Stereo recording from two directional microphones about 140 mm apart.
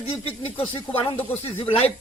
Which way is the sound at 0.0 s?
45° left (ahead or behind).